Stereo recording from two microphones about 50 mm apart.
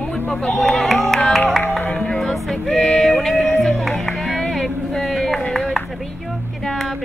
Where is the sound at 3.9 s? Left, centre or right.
Centre.